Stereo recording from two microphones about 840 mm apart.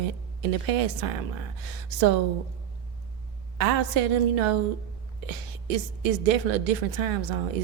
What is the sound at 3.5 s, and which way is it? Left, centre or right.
A woman's voice, right.